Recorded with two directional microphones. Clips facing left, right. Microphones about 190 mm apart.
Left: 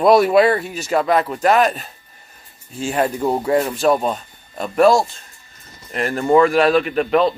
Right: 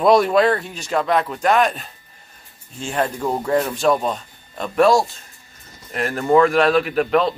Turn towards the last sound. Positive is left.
turn(degrees=0)  # may be behind; listen again after turning